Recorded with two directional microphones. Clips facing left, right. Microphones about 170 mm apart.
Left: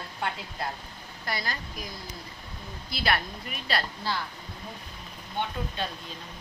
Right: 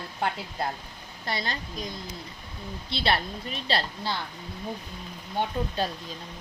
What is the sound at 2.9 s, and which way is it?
A woman's voice, 30° right (ahead or behind).